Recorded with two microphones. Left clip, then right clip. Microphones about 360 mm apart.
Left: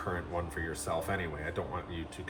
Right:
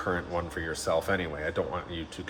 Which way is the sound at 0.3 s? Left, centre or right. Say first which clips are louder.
Right 4 dB; right.